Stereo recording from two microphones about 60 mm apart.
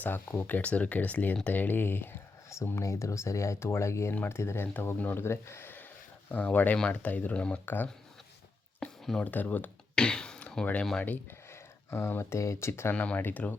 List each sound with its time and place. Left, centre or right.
0.0 s speech: left
2.5 s a sound: left
2.8 s speech: left
4.1 s speech: left
6.3 s speech: left
7.6 s speech: left
8.8 s a sound: centre
9.2 s speech: left
9.9 s throat clearing: centre
11.9 s speech: left
12.9 s speech: left